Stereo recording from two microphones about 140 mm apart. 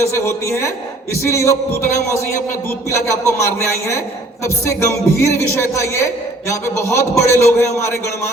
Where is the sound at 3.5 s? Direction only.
20° left (ahead or behind).